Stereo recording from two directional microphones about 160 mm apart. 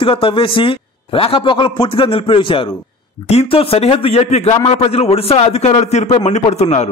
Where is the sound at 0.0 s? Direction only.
35° left (ahead or behind).